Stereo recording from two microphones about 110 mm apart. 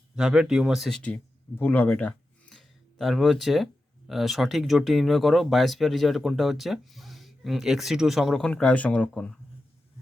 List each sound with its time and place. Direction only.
0.2 s speech: 5° right (ahead or behind)
1.5 s speech: 15° left (ahead or behind)